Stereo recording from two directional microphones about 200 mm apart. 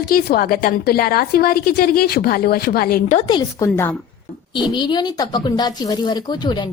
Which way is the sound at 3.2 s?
25° left (ahead or behind).